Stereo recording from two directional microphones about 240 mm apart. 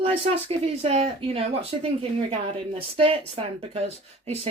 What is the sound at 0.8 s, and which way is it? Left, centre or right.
Speech, right.